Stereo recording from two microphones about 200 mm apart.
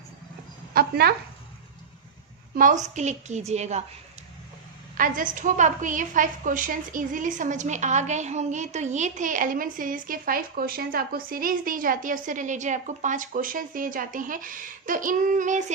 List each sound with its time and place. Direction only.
0.7 s a sound: 50° right (ahead or behind)
2.6 s a woman's voice: 40° right (ahead or behind)
4.9 s a woman's voice: 45° right (ahead or behind)